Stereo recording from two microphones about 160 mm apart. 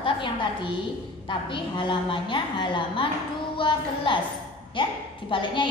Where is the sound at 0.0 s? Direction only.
30° left (ahead or behind).